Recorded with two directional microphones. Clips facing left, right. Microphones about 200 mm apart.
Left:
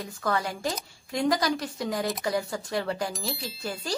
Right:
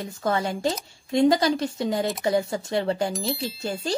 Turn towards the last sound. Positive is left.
turn(degrees=0)  # may be behind; listen again after turning